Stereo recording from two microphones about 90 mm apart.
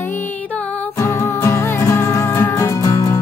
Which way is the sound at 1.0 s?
30° left (ahead or behind).